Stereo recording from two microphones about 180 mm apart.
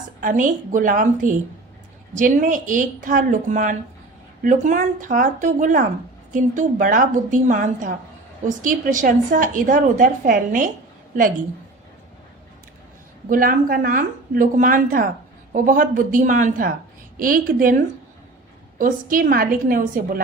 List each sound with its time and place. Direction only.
0.2 s a woman's voice: 45° right (ahead or behind)
13.3 s a woman's voice: 50° right (ahead or behind)
18.8 s a woman's voice: 50° right (ahead or behind)